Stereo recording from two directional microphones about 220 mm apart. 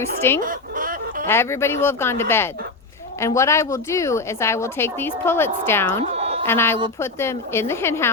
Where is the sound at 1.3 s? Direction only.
10° left (ahead or behind).